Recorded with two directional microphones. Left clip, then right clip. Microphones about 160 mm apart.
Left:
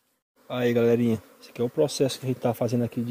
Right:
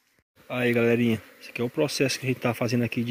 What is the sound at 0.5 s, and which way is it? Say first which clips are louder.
Speech: left 1 dB; centre (ahead or behind).